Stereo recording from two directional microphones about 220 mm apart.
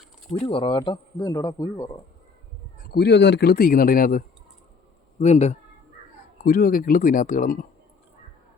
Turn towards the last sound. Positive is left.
turn(degrees=40)  # may be behind; listen again after turning